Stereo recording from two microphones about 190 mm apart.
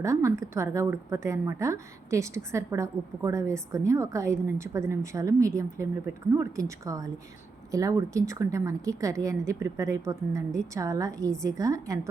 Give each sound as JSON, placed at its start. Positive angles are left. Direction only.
{"t": 0.0, "sound": "a woman's voice", "side_deg": -15}